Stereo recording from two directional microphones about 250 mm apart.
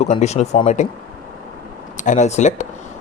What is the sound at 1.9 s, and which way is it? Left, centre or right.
Speech, left.